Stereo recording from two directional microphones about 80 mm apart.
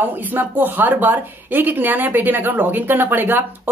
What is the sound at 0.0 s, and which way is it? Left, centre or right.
A woman's voice, right.